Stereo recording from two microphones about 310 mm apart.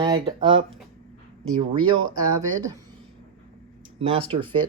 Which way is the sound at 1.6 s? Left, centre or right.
Centre.